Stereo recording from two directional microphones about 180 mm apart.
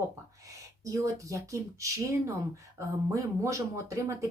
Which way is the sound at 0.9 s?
20° right (ahead or behind).